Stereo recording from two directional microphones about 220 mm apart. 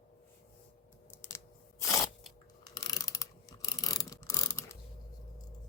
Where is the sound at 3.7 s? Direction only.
15° left (ahead or behind).